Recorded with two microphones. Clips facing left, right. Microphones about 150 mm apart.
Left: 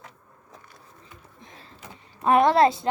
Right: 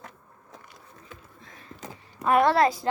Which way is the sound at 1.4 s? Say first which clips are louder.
Left 2 dB; 20° left (ahead or behind).